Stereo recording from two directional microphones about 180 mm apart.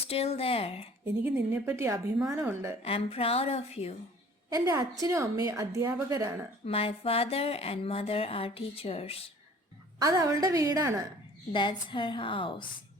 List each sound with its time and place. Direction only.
0.0 s speech: 35° left (ahead or behind)
1.0 s a woman's voice: 15° right (ahead or behind)
2.8 s speech: 30° left (ahead or behind)
4.4 s a woman's voice: 20° right (ahead or behind)
6.7 s speech: 30° left (ahead or behind)
10.0 s a woman's voice: 20° right (ahead or behind)
11.5 s a woman's voice: 25° left (ahead or behind)